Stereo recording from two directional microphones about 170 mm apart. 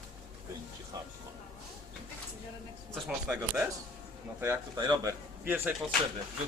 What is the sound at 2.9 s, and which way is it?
Speech, 5° right (ahead or behind).